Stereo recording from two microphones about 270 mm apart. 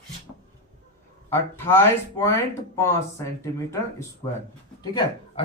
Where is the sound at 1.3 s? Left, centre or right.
Centre.